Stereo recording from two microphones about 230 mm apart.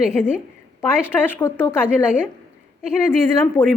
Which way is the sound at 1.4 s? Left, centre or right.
Centre.